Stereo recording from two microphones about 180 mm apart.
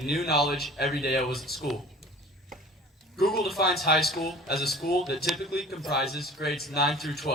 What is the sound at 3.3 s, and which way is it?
Speech, centre (ahead or behind).